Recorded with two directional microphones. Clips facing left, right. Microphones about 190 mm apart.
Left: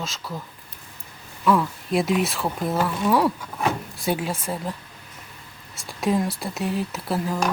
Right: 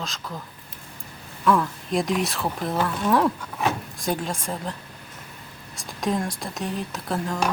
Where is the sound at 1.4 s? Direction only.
5° left (ahead or behind).